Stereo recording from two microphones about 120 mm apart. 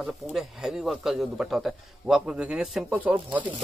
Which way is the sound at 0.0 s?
5° right (ahead or behind).